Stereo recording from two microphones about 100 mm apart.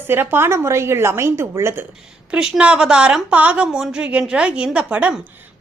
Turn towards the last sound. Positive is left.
turn(degrees=-15)  # may be behind; listen again after turning